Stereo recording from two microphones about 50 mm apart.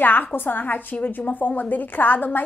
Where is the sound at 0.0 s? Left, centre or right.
Left.